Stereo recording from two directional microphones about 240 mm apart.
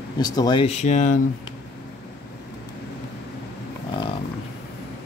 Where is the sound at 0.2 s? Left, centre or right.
Centre.